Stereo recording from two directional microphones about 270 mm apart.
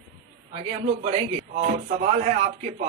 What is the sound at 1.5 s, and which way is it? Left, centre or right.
Speech, right.